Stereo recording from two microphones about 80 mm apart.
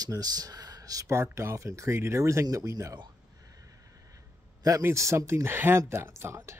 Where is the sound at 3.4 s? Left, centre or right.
Right.